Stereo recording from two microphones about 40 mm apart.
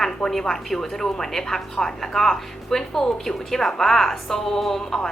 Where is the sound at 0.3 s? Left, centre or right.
Centre.